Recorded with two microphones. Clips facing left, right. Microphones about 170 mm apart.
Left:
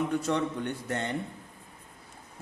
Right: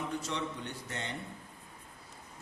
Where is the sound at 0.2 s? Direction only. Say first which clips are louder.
Left 8 dB; 55° left (ahead or behind).